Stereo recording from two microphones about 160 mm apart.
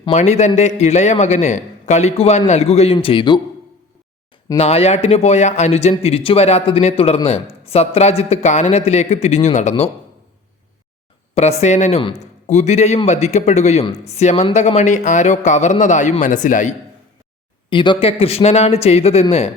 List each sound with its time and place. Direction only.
0.0 s a man's voice: 45° left (ahead or behind)
4.5 s a man's voice: 40° left (ahead or behind)
11.3 s a man's voice: 45° left (ahead or behind)
17.7 s a man's voice: 30° left (ahead or behind)